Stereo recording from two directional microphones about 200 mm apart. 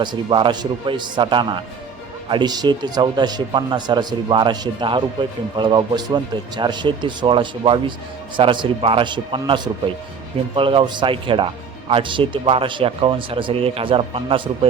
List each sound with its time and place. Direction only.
0.0 s speech: 25° right (ahead or behind)